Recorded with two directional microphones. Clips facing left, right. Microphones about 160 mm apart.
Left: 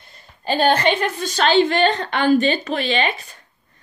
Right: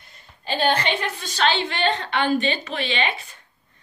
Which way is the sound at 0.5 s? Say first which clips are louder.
Left 5 dB; 45° left (ahead or behind).